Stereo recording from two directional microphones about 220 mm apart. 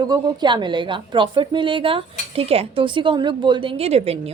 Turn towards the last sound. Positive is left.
turn(degrees=-25)  # may be behind; listen again after turning